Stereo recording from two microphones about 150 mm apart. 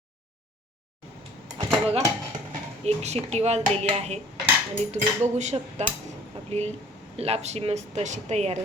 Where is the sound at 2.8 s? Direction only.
45° right (ahead or behind).